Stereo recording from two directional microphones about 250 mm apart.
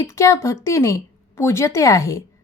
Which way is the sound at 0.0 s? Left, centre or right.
Centre.